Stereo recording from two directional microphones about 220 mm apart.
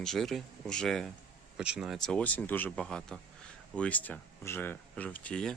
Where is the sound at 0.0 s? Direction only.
Centre (ahead or behind).